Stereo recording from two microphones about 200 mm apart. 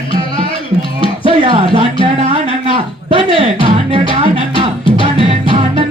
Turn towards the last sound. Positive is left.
turn(degrees=-25)  # may be behind; listen again after turning